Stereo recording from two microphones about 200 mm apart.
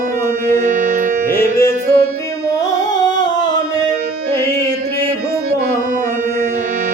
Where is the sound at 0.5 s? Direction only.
40° right (ahead or behind).